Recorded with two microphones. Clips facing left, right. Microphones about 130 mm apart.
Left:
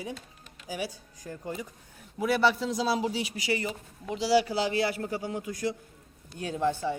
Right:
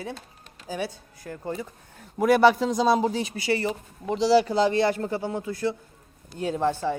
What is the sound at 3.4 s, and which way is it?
Speech, 15° left (ahead or behind).